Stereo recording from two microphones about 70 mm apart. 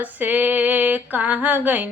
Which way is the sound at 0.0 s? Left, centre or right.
Right.